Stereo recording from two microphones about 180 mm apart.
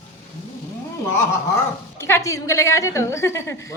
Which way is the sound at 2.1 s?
15° left (ahead or behind).